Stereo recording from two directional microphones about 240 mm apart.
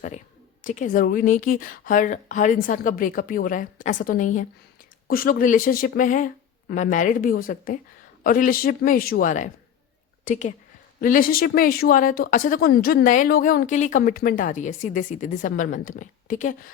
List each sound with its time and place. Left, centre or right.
0.6 s speech: left